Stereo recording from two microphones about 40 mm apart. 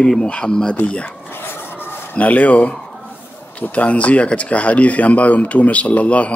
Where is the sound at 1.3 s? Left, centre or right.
Left.